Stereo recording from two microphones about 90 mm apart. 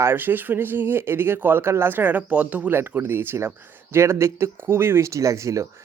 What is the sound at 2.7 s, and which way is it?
Speech, 25° right (ahead or behind).